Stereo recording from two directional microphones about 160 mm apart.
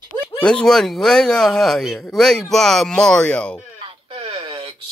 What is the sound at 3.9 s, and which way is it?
Radio, 35° right (ahead or behind).